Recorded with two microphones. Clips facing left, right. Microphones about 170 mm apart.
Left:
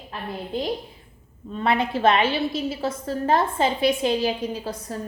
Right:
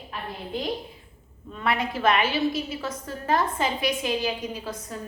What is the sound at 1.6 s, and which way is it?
A woman's voice, 25° left (ahead or behind).